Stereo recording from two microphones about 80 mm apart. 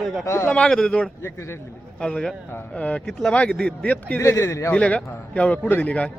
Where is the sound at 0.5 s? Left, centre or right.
Centre.